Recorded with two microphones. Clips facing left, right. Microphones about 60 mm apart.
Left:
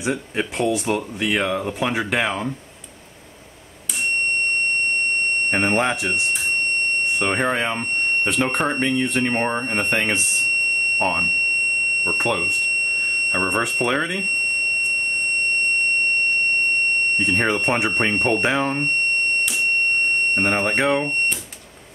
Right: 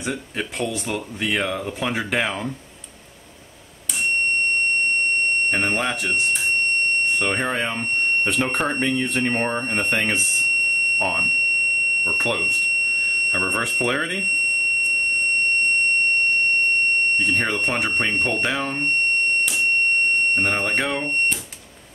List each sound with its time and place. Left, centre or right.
0.0 s speech: centre
5.5 s speech: left
7.2 s speech: centre
9.5 s speech: centre
11.0 s speech: centre
12.2 s speech: centre
13.4 s speech: centre
17.2 s speech: left
20.3 s speech: centre